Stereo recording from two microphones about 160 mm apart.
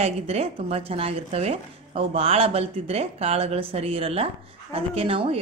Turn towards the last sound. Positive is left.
turn(degrees=-35)  # may be behind; listen again after turning